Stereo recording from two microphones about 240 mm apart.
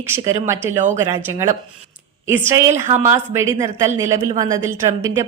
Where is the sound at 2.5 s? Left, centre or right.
Centre.